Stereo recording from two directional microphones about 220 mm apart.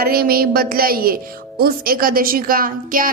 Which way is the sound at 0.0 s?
40° right (ahead or behind).